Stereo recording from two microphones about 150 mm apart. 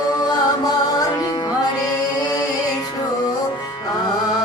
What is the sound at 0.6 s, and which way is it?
Music, 25° left (ahead or behind).